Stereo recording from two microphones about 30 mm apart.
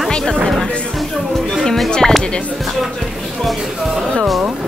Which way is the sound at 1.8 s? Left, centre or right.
Left.